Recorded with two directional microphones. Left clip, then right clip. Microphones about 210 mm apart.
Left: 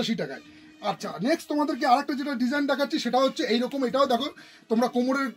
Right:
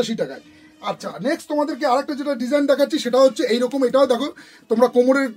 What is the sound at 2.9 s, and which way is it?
Speech, 25° right (ahead or behind).